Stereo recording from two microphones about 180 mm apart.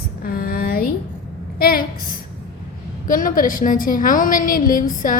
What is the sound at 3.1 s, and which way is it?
A woman's voice, 50° left (ahead or behind).